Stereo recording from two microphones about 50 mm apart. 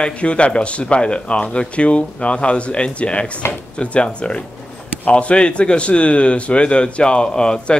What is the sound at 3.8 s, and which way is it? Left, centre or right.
Speech, left.